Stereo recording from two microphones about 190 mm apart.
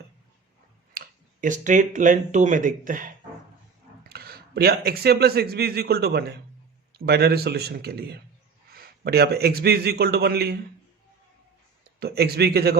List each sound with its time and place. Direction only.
0.9 s speech: 45° right (ahead or behind)
4.1 s a man's voice: 55° right (ahead or behind)
11.9 s speech: 55° right (ahead or behind)